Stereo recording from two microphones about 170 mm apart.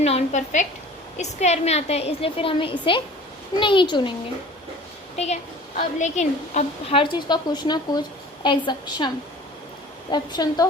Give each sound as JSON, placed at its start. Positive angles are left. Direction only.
{"t": 0.0, "sound": "a woman's voice", "side_deg": 40}
{"t": 5.1, "sound": "a woman's voice", "side_deg": 40}
{"t": 7.0, "sound": "speech", "side_deg": 25}